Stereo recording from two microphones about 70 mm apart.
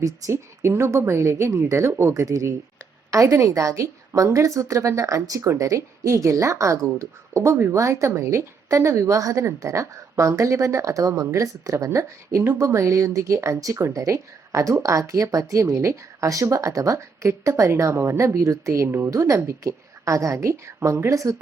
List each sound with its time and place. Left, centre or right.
0.0 s speech: right
0.7 s speech: right
2.2 s speech: right
19.1 s speech: right